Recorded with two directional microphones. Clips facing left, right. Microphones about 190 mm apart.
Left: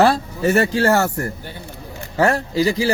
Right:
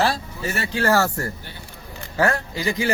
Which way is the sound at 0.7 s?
35° left (ahead or behind).